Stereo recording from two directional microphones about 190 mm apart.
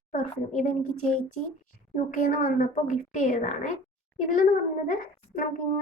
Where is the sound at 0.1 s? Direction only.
45° left (ahead or behind).